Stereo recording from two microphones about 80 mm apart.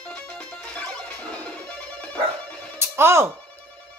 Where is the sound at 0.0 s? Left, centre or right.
Centre.